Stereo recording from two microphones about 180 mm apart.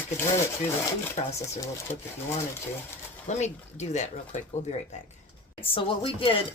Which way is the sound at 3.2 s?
40° left (ahead or behind).